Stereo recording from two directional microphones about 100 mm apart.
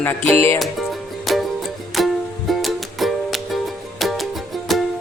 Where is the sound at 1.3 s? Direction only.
Centre (ahead or behind).